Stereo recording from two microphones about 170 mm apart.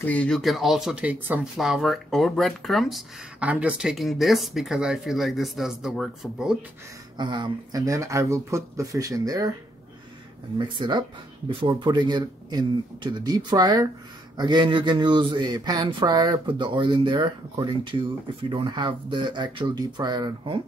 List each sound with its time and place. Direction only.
0.0 s speech: 10° left (ahead or behind)
7.2 s a man's voice: 25° right (ahead or behind)
10.6 s a man's voice: 25° right (ahead or behind)